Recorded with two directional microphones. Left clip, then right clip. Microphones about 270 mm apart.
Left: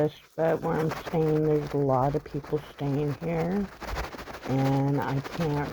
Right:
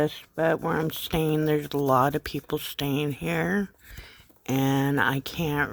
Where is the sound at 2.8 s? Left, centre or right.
Right.